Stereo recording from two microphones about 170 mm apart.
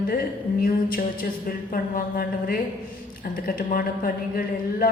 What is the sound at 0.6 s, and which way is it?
Speech, 60° left (ahead or behind).